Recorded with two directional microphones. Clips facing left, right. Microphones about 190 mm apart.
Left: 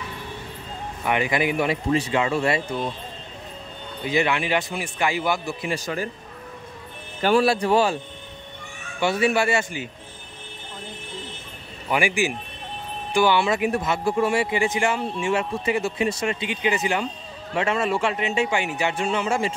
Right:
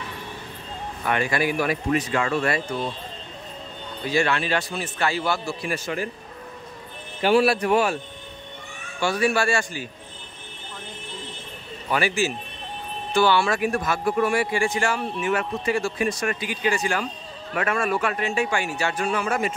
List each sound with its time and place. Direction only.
1.0 s speech: 15° left (ahead or behind)
4.0 s a man's voice: 20° left (ahead or behind)
7.5 s speech: 30° left (ahead or behind)
9.0 s speech: 20° left (ahead or behind)
11.9 s a man's voice: 15° left (ahead or behind)